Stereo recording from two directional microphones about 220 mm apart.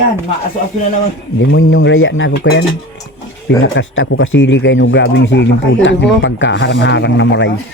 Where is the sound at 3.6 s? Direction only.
60° left (ahead or behind).